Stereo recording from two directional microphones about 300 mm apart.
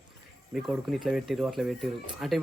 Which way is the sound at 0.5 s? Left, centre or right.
Centre.